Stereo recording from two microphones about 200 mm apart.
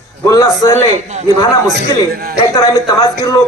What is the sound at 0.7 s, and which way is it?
Speech, 35° right (ahead or behind).